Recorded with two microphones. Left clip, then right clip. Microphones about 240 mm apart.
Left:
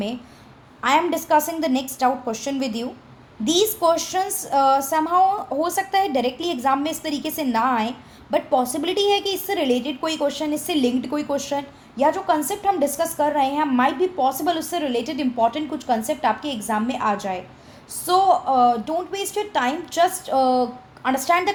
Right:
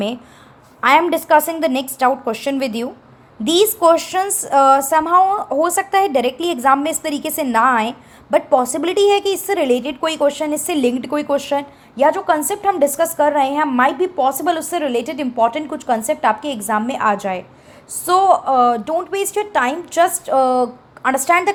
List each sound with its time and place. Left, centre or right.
0.8 s a woman's voice: right